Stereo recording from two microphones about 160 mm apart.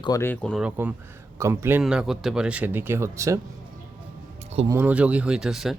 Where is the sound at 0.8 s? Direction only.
15° right (ahead or behind).